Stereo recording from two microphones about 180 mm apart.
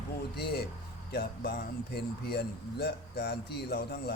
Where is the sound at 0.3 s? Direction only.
60° left (ahead or behind).